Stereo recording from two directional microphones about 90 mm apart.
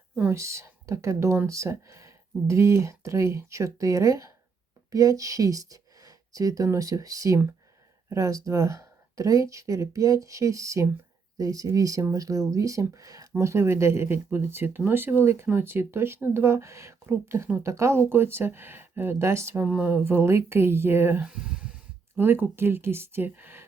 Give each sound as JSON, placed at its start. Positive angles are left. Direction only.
{"t": 0.3, "sound": "speech", "side_deg": -30}
{"t": 19.6, "sound": "speech", "side_deg": -15}
{"t": 19.9, "sound": "speech", "side_deg": -25}
{"t": 21.2, "sound": "speech", "side_deg": -10}
{"t": 22.1, "sound": "speech", "side_deg": -25}